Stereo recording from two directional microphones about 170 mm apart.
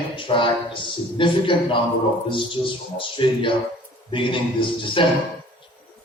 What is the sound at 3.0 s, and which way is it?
Speech, 30° left (ahead or behind).